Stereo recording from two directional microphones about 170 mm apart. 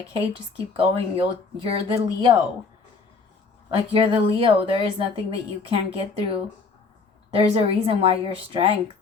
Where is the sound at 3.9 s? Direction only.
30° right (ahead or behind).